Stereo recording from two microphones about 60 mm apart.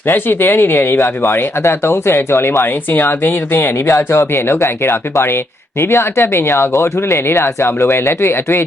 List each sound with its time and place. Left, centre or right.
0.1 s speech: left